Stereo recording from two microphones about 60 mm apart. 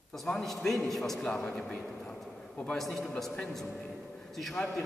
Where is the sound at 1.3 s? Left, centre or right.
Left.